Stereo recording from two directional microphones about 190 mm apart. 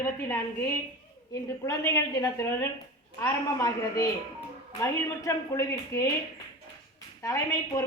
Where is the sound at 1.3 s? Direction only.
15° left (ahead or behind).